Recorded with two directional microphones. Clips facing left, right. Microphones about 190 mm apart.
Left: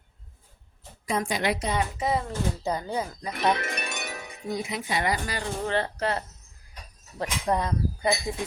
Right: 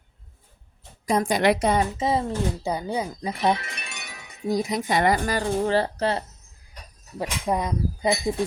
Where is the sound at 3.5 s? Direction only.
55° left (ahead or behind).